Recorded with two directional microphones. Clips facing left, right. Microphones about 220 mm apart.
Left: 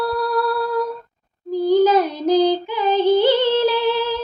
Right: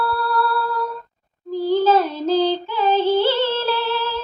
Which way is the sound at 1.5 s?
15° left (ahead or behind).